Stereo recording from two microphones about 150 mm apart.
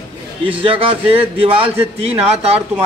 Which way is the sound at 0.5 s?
35° right (ahead or behind).